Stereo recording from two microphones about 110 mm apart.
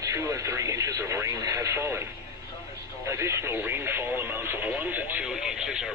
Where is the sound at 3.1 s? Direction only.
25° right (ahead or behind); by 5.9 s 5° right (ahead or behind).